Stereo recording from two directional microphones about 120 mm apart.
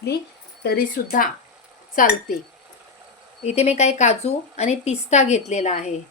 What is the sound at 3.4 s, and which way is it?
A woman's voice, 65° left (ahead or behind).